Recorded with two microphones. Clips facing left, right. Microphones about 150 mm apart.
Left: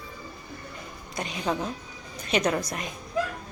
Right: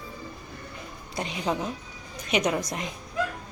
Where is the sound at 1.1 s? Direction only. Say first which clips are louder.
Even; 25° right (ahead or behind).